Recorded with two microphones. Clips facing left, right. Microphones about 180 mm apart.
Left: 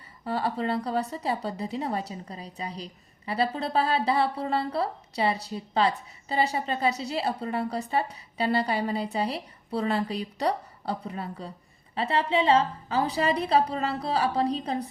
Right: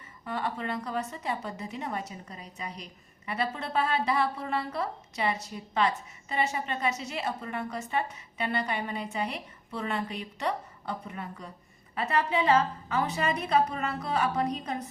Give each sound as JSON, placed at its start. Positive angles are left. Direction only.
{"t": 0.3, "sound": "a woman's voice", "side_deg": 35}